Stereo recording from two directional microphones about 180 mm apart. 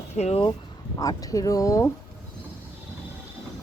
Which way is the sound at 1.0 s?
20° left (ahead or behind).